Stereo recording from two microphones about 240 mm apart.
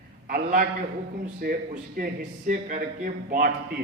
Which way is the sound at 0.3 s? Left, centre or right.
Right.